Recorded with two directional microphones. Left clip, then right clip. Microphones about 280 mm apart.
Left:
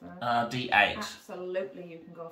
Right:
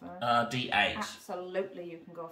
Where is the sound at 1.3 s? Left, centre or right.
Centre.